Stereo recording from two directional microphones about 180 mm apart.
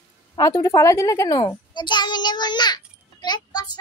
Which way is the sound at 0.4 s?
20° left (ahead or behind).